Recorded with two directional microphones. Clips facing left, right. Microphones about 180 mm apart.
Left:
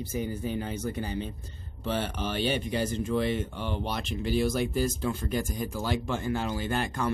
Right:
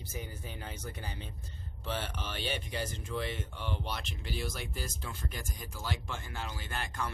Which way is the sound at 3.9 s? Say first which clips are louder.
Left 11 dB; 80° left.